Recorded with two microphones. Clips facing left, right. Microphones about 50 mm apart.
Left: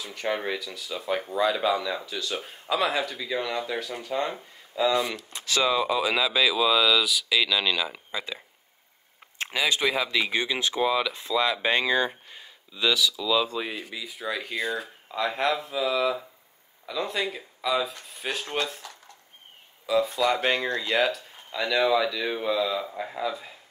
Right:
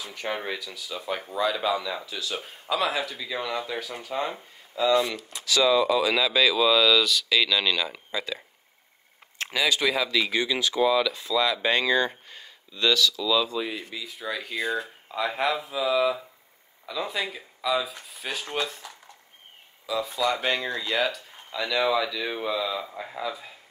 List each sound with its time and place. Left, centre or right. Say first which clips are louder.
0.0 s speech: left 2 dB; centre
4.4 s speech: left 1 dB; centre
5.0 s speech: right 1 dB; left
5.7 s speech: right 4 dB; centre
8.1 s speech: right 2 dB; centre
9.4 s speech: right 1 dB; left
13.5 s speech: right 1 dB; left
13.9 s speech: left 1 dB; centre
14.8 s speech: even; centre